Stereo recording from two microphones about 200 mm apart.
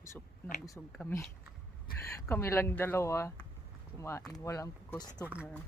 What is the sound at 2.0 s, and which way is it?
Speech, 15° left (ahead or behind).